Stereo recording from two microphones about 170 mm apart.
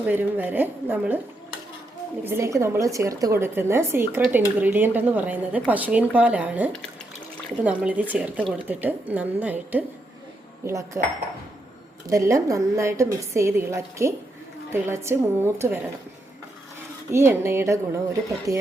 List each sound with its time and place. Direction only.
0.0 s a woman's voice: 10° right (ahead or behind)
2.2 s a woman's voice: 15° right (ahead or behind)
12.0 s a woman's voice: 20° right (ahead or behind)
17.1 s a woman's voice: 15° right (ahead or behind)